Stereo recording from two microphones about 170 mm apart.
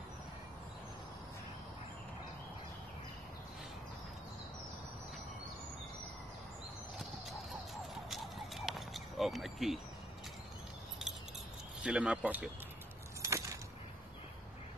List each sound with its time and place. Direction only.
7.9 s a sound: centre (ahead or behind)
11.8 s speech: 5° right (ahead or behind)
13.2 s keys jangling: 15° right (ahead or behind)